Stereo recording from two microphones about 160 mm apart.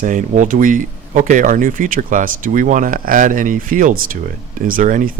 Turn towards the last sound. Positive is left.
turn(degrees=-55)  # may be behind; listen again after turning